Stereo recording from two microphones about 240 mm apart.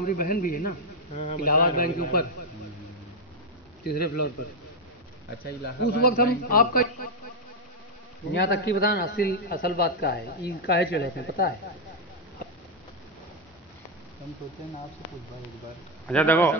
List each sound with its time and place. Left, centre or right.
0.0 s a man's voice: left
3.8 s a man's voice: left
5.8 s a man's voice: left
8.3 s a man's voice: left
16.1 s speech: centre